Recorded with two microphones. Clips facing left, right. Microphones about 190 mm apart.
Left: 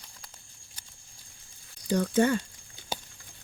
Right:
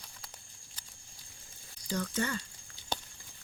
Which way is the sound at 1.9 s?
55° left (ahead or behind).